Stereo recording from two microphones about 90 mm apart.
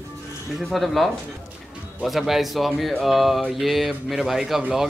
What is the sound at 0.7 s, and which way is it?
Speech, centre (ahead or behind).